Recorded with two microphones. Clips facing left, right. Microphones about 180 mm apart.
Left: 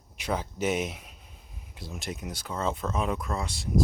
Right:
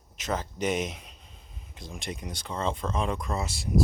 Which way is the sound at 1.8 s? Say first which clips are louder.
Left 1 dB; 5° left (ahead or behind).